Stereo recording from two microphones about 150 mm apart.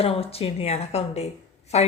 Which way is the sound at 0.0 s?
40° left (ahead or behind).